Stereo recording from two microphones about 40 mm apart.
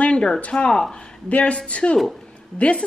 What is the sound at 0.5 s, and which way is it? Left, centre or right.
A woman's voice, left.